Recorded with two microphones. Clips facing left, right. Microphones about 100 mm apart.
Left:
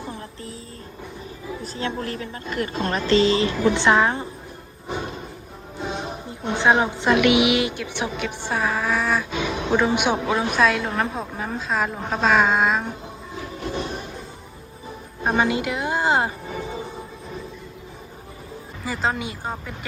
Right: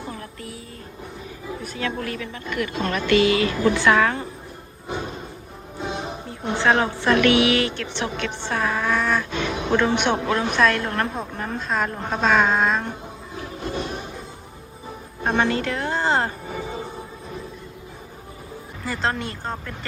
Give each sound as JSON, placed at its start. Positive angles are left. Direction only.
{"t": 0.1, "sound": "music", "side_deg": 25}
{"t": 1.6, "sound": "a woman's voice", "side_deg": 30}
{"t": 4.9, "sound": "thump", "side_deg": 5}
{"t": 5.8, "sound": "music", "side_deg": -5}
{"t": 6.5, "sound": "a woman's voice", "side_deg": 15}
{"t": 13.7, "sound": "music", "side_deg": 0}
{"t": 15.2, "sound": "a woman's voice", "side_deg": 10}
{"t": 16.5, "sound": "train", "side_deg": -10}
{"t": 18.8, "sound": "speech", "side_deg": 5}